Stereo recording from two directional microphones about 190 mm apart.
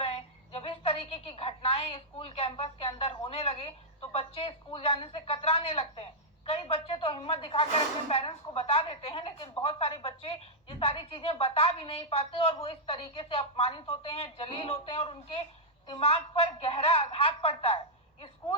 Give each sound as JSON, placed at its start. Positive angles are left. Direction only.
{"t": 0.0, "sound": "a woman's voice", "side_deg": 30}